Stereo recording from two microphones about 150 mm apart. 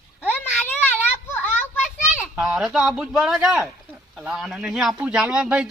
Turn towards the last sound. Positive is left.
turn(degrees=-5)  # may be behind; listen again after turning